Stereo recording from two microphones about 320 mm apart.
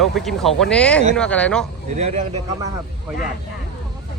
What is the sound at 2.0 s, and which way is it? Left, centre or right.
Speech, right.